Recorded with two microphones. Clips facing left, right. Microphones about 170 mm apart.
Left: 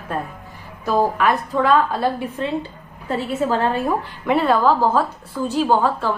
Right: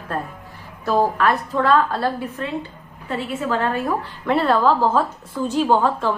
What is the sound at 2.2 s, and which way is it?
A woman's voice, 30° left (ahead or behind).